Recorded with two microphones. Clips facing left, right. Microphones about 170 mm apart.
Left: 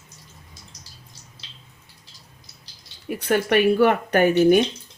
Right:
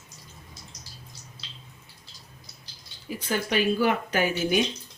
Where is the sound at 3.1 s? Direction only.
65° left (ahead or behind).